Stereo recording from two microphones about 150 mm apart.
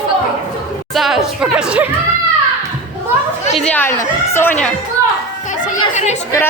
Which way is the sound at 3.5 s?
5° left (ahead or behind).